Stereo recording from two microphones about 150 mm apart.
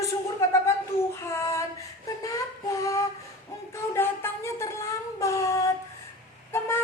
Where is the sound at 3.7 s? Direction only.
15° left (ahead or behind).